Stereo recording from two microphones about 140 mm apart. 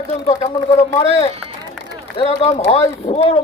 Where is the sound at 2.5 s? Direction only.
50° left (ahead or behind).